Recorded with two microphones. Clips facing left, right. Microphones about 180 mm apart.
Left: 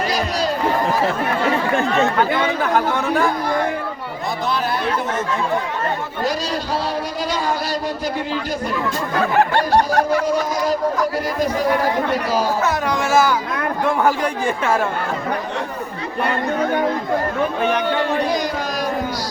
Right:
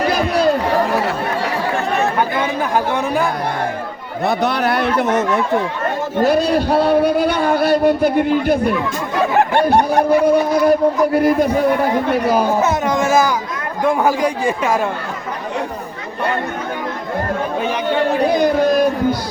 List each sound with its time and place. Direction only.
0.1 s run: 55° right (ahead or behind)
4.3 s speech: 65° right (ahead or behind)
6.2 s speech: 60° right (ahead or behind)
9.7 s speech: 20° right (ahead or behind)
10.2 s speech: 60° right (ahead or behind)
12.6 s speech: 20° right (ahead or behind)
18.3 s speech: 60° right (ahead or behind)